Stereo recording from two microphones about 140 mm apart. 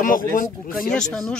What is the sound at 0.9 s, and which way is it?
Speech, 5° left (ahead or behind).